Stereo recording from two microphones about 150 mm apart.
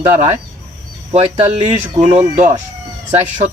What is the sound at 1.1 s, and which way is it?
Speech, 45° right (ahead or behind).